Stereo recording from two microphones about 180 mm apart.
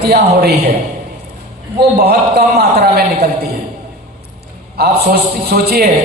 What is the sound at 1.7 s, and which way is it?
A man's voice, 60° right (ahead or behind).